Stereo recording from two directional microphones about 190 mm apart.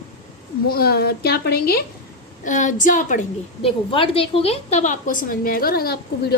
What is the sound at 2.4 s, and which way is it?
Speech, 40° left (ahead or behind).